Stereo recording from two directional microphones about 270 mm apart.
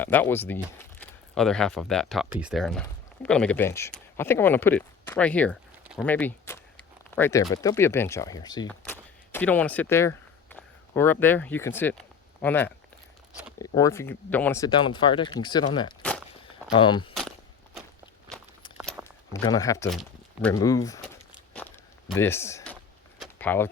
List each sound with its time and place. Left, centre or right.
0.0 s speech: centre
16.4 s walk: centre
18.8 s a sound: centre
19.0 s speech: centre
21.3 s walk: centre
22.1 s a sound: centre